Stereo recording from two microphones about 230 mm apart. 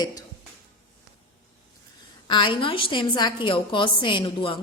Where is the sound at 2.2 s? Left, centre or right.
Centre.